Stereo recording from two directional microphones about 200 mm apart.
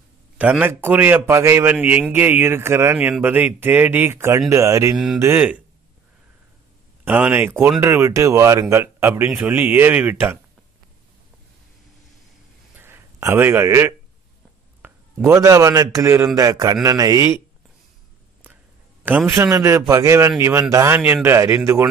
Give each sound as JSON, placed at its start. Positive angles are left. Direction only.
{"t": 0.4, "sound": "a man's voice", "side_deg": -10}
{"t": 4.9, "sound": "a man's voice", "side_deg": 0}
{"t": 7.1, "sound": "a man's voice", "side_deg": -10}
{"t": 12.7, "sound": "a sound", "side_deg": -10}
{"t": 14.8, "sound": "a man's voice", "side_deg": -10}
{"t": 19.0, "sound": "a man's voice", "side_deg": -10}